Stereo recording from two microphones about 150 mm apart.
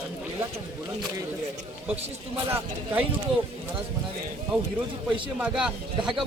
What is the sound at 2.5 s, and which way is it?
Speech, 15° right (ahead or behind).